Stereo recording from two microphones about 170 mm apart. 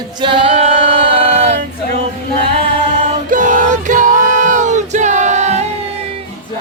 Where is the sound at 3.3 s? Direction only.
50° right (ahead or behind).